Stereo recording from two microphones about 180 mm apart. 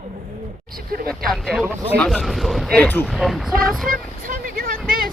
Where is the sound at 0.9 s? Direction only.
55° right (ahead or behind).